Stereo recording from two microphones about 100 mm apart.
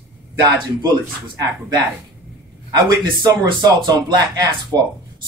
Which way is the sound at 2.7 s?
45° right (ahead or behind).